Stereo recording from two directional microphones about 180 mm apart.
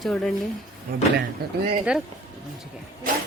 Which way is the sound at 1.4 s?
60° right (ahead or behind).